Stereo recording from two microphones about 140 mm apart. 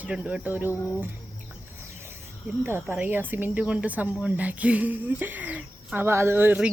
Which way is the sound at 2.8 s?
10° right (ahead or behind).